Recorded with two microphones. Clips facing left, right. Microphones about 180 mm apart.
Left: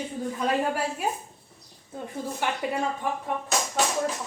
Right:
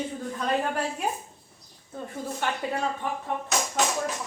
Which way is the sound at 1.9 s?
15° left (ahead or behind).